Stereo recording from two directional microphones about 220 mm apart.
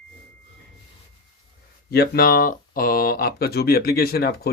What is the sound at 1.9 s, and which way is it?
Speech, 45° left (ahead or behind).